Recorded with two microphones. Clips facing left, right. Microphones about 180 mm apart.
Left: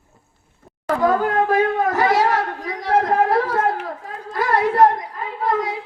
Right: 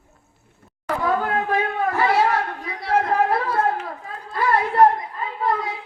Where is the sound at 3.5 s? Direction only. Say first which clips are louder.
Left 1 dB; 90° left.